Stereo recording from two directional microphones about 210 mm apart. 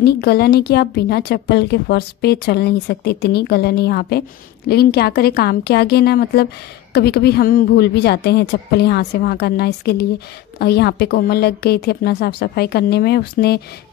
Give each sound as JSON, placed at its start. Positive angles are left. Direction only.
{"t": 0.0, "sound": "speech", "side_deg": 50}